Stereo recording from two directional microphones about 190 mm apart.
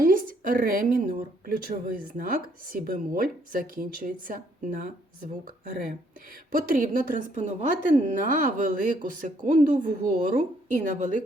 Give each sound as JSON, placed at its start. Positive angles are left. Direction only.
{"t": 0.0, "sound": "speech", "side_deg": -45}